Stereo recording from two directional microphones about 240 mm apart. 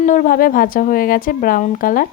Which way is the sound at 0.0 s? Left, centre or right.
Left.